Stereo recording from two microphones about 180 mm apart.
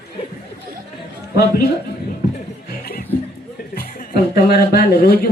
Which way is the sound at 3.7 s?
55° left (ahead or behind).